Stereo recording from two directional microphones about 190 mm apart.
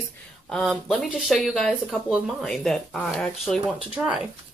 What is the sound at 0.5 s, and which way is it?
Speech, centre (ahead or behind).